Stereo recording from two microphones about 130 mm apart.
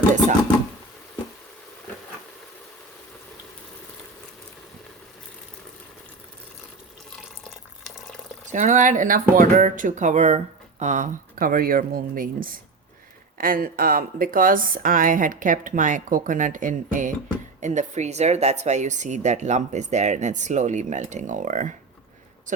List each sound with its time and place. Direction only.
7.4 s water: centre (ahead or behind)
8.5 s speech: 70° right (ahead or behind)
17.6 s speech: 65° right (ahead or behind)
22.5 s speech: 80° right